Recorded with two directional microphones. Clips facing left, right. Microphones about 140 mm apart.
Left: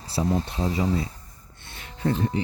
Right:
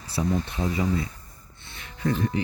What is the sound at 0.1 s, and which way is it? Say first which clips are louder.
Speech: left 1 dB; 35° left (ahead or behind).